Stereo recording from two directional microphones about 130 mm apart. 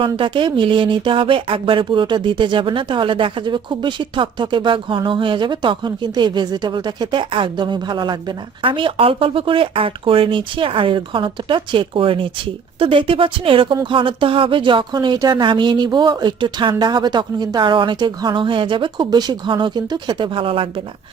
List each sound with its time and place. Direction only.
0.2 s a woman's voice: 40° right (ahead or behind)